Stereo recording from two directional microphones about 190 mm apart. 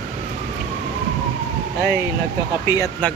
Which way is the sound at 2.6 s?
15° left (ahead or behind).